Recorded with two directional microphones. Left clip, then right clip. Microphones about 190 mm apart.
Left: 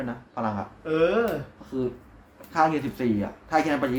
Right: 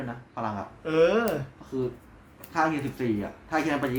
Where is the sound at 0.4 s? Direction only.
30° left (ahead or behind).